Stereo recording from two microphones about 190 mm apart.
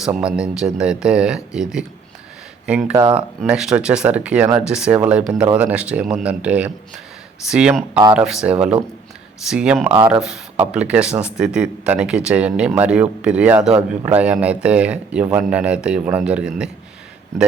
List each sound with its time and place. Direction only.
0.0 s speech: 5° right (ahead or behind)
2.9 s speech: 20° right (ahead or behind)
3.2 s speech: 5° right (ahead or behind)